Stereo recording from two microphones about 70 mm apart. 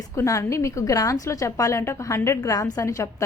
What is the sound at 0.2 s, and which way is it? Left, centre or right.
A woman's voice, left.